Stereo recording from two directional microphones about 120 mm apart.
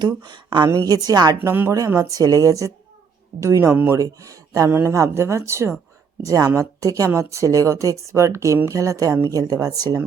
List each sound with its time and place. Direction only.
0.0 s speech: 35° right (ahead or behind)
1.5 s speech: 20° right (ahead or behind)